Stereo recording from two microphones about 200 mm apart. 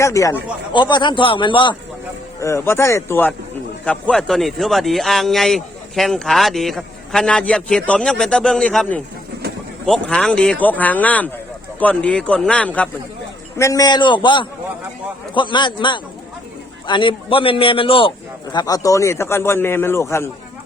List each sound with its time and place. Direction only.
0.0 s a man's voice: 15° left (ahead or behind)
2.4 s a man's voice: 15° left (ahead or behind)